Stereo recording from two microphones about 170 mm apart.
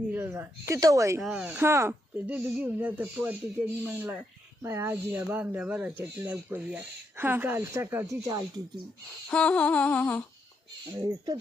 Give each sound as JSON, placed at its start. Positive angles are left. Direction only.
{"t": 0.1, "sound": "speech", "side_deg": -10}
{"t": 1.2, "sound": "speech", "side_deg": -5}
{"t": 9.3, "sound": "humming", "side_deg": 5}
{"t": 11.0, "sound": "speech", "side_deg": -20}